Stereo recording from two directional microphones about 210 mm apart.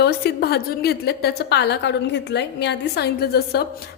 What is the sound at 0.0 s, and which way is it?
A woman's voice, 50° left (ahead or behind).